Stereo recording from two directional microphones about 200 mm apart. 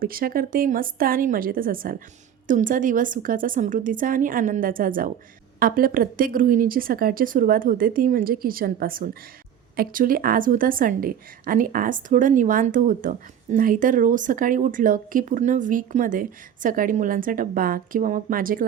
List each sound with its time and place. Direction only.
0.0 s a woman's voice: 45° right (ahead or behind)